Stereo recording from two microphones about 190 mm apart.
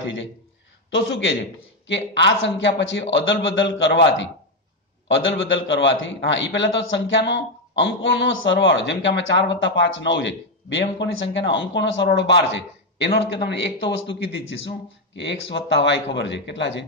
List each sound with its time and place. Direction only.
0.8 s a man's voice: 85° left
1.9 s speech: 70° left (ahead or behind)